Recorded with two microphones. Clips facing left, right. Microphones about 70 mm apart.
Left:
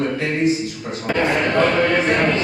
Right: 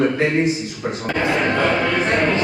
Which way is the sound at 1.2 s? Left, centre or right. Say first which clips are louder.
Left 1 dB; centre.